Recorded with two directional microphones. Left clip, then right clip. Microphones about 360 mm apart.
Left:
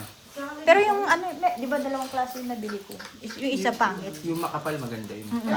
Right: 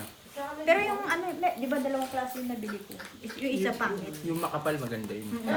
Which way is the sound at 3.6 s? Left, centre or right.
Centre.